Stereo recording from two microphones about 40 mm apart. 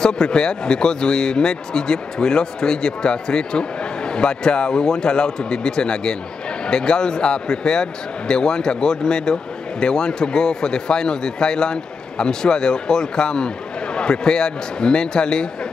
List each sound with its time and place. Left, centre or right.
0.0 s a man's voice: centre